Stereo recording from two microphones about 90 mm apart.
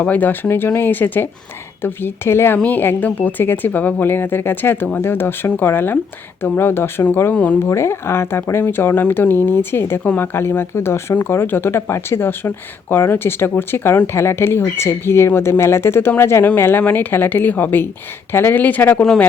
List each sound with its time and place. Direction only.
0.0 s speech: 20° left (ahead or behind)
7.6 s speech: 30° left (ahead or behind)